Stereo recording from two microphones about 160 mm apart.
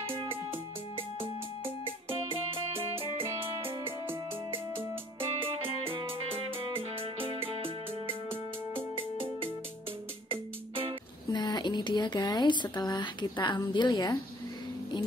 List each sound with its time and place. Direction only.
1.2 s music: 35° right (ahead or behind)
3.8 s music: 15° right (ahead or behind)
5.2 s music: 35° right (ahead or behind)
10.3 s music: 35° right (ahead or behind)
11.2 s speech: 25° left (ahead or behind)